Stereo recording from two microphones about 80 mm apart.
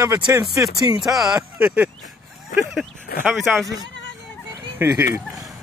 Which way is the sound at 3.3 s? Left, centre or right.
Centre.